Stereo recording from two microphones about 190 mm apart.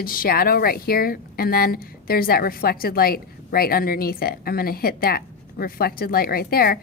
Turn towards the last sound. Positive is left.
turn(degrees=50)  # may be behind; listen again after turning